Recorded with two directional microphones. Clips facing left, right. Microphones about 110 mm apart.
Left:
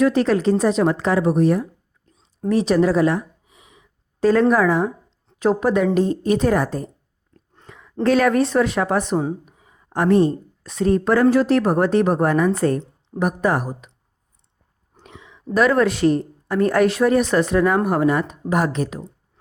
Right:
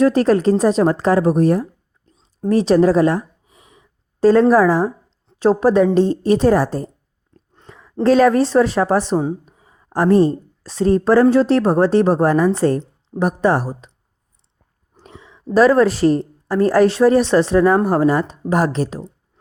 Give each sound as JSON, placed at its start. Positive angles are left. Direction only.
{"t": 0.0, "sound": "a woman's voice", "side_deg": -40}
{"t": 2.0, "sound": "a sound", "side_deg": -35}
{"t": 5.4, "sound": "a woman's voice", "side_deg": -35}
{"t": 7.3, "sound": "a sound", "side_deg": -25}
{"t": 8.0, "sound": "a woman's voice", "side_deg": -30}
{"t": 15.0, "sound": "a woman's voice", "side_deg": -35}